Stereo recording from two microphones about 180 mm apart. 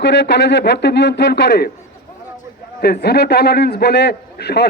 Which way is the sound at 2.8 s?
65° left (ahead or behind).